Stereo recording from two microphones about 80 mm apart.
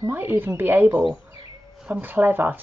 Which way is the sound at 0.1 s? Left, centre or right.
Right.